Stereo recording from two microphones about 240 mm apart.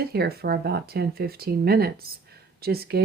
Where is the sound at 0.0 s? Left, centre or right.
Right.